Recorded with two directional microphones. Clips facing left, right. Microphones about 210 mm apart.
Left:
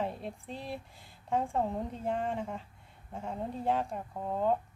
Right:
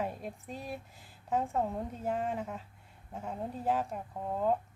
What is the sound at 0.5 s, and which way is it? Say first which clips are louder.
Speech: left 1 dB; 30° left (ahead or behind).